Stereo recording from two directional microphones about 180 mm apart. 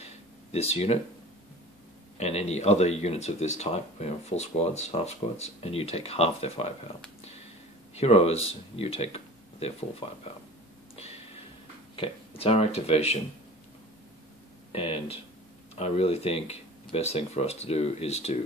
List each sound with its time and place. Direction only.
0.0 s a sound: 35° left (ahead or behind)
2.1 s speech: 40° left (ahead or behind)
7.9 s speech: 35° left (ahead or behind)
11.9 s speech: 30° left (ahead or behind)
14.7 s speech: 35° left (ahead or behind)